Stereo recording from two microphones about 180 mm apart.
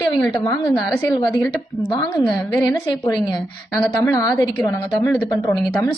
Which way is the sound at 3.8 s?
15° left (ahead or behind).